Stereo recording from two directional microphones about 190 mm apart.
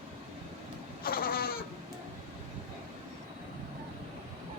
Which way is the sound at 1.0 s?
50° left (ahead or behind).